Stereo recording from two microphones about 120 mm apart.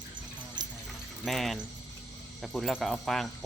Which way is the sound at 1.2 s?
Centre (ahead or behind).